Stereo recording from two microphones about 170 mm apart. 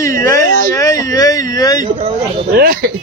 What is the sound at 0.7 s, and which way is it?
Speech, 20° left (ahead or behind).